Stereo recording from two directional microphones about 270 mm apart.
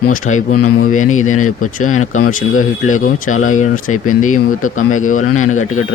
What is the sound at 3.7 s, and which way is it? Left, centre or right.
Speech, left.